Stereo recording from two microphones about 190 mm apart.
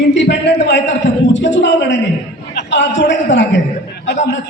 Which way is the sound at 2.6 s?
70° left (ahead or behind).